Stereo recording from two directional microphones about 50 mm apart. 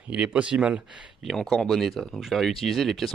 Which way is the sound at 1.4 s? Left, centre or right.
Centre.